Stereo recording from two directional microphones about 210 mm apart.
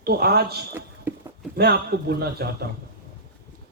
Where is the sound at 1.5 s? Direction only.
50° right (ahead or behind).